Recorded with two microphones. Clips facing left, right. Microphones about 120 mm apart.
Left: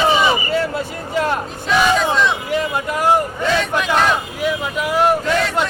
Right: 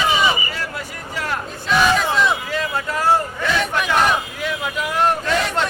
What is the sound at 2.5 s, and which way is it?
Speech, 20° left (ahead or behind).